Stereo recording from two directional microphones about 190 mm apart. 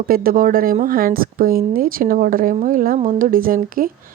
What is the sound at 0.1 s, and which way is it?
A woman's voice, 50° right (ahead or behind).